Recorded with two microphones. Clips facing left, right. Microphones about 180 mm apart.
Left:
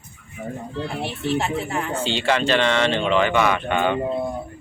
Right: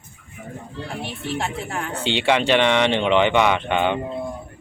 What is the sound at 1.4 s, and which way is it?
Speech, 5° left (ahead or behind).